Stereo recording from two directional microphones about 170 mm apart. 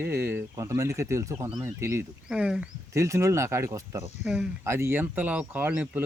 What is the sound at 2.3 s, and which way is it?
Speech, 5° right (ahead or behind).